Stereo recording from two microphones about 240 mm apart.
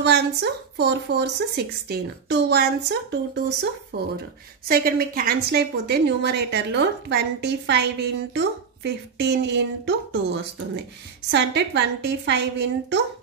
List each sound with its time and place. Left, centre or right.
0.0 s a woman's voice: right